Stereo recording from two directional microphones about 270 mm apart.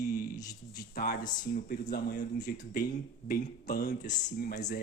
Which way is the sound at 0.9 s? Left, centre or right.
Left.